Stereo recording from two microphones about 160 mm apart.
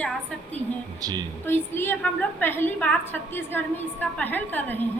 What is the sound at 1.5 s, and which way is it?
A woman's voice, 15° left (ahead or behind).